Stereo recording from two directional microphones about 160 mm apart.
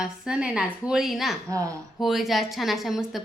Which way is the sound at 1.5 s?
20° right (ahead or behind).